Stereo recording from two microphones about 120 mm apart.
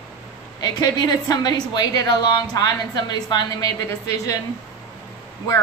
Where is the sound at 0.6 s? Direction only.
35° left (ahead or behind).